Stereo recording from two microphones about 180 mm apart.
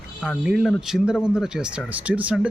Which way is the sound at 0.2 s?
5° right (ahead or behind).